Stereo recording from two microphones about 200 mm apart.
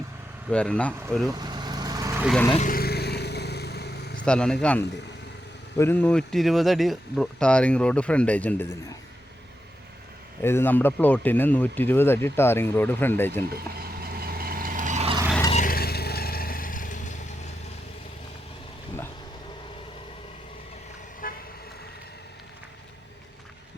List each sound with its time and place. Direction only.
0.5 s speech: 5° left (ahead or behind)
1.3 s vehicle: 20° right (ahead or behind)
2.6 s vehicle: 45° left (ahead or behind)
4.2 s speech: 5° left (ahead or behind)
10.4 s speech: 10° left (ahead or behind)
13.4 s vehicle: 50° right (ahead or behind)
15.5 s vehicle: 45° left (ahead or behind)
21.2 s vehicle: 45° left (ahead or behind)